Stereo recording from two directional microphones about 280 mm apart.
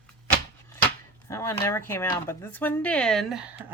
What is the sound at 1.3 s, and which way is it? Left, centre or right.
Speech, centre.